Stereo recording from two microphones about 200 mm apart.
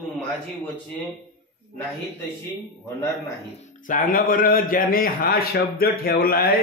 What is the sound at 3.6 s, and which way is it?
A man's voice, 40° left (ahead or behind).